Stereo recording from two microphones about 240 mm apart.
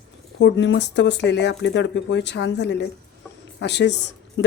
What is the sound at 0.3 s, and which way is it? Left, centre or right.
Speech, left.